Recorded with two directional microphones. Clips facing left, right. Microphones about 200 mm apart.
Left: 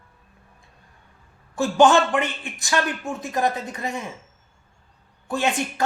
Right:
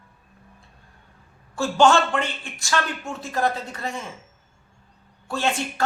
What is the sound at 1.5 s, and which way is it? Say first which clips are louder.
Speech: left 2 dB; 15° left (ahead or behind).